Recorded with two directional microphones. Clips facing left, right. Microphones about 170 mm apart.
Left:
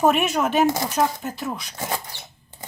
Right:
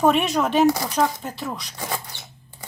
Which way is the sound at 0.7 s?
20° left (ahead or behind).